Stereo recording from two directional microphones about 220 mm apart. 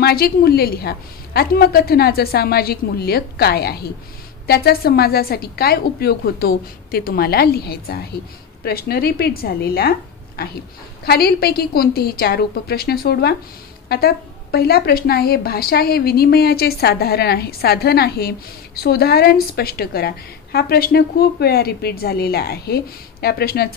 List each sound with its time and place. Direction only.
0.0 s a woman's voice: 45° left (ahead or behind)